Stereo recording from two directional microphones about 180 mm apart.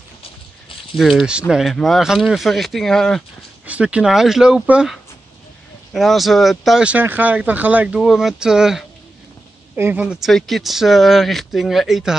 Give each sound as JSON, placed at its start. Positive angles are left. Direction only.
{"t": 0.9, "sound": "speech", "side_deg": 0}